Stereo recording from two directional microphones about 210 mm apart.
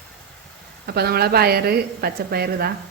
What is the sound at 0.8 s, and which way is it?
A woman's voice, 50° right (ahead or behind).